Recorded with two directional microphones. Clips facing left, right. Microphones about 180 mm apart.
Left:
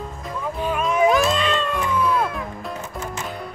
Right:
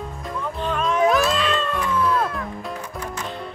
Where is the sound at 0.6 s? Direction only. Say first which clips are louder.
Left 1 dB; 10° left (ahead or behind).